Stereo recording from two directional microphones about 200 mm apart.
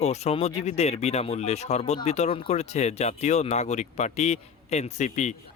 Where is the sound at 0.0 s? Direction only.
35° left (ahead or behind).